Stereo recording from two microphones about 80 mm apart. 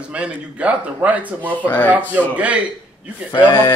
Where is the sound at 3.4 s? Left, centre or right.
Left.